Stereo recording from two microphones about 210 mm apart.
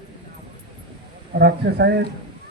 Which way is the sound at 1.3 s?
50° right (ahead or behind).